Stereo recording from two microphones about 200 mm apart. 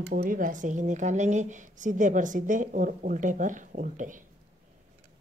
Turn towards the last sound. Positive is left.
turn(degrees=-40)  # may be behind; listen again after turning